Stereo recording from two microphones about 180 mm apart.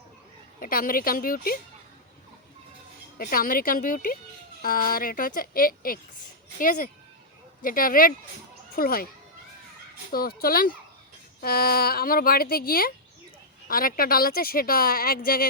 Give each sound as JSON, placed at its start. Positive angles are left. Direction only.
{"t": 0.6, "sound": "speech", "side_deg": 55}
{"t": 3.2, "sound": "a child's voice", "side_deg": 50}
{"t": 10.1, "sound": "speech", "side_deg": 55}